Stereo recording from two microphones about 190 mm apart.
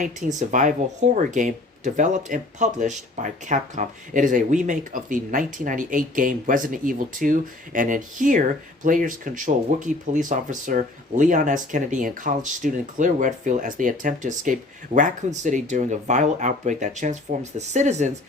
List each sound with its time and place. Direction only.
0.3 s speech: 40° right (ahead or behind)